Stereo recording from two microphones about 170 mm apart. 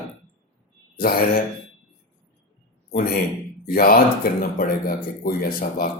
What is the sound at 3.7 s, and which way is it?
Speech, 60° left (ahead or behind).